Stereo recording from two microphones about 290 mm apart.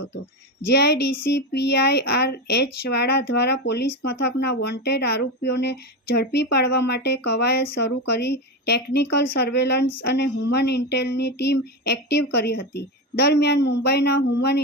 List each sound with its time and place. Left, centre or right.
0.7 s speech: left